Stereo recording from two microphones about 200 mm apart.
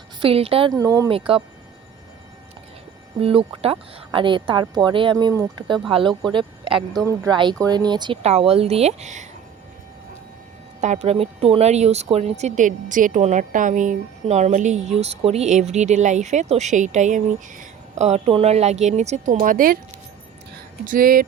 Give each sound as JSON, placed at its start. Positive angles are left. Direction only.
{"t": 0.2, "sound": "speech", "side_deg": -30}
{"t": 0.8, "sound": "speech", "side_deg": -20}
{"t": 3.2, "sound": "speech", "side_deg": -30}
{"t": 10.8, "sound": "speech", "side_deg": -35}
{"t": 20.8, "sound": "speech", "side_deg": -45}